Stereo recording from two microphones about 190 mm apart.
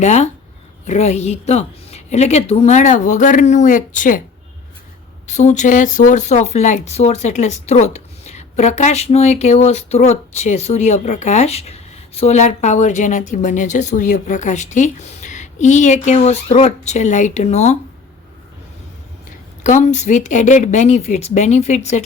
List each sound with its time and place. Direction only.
0.0 s a woman's voice: 35° left (ahead or behind)
5.2 s a woman's voice: 40° left (ahead or behind)
19.6 s a woman's voice: 40° left (ahead or behind)